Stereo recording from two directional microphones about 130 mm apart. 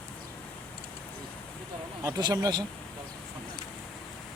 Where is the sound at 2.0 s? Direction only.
30° right (ahead or behind).